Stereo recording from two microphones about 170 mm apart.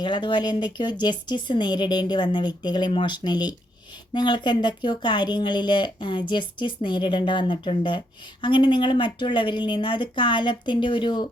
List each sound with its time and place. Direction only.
0.0 s speech: 25° left (ahead or behind)